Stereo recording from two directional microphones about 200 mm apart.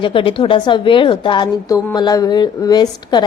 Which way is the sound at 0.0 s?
25° left (ahead or behind).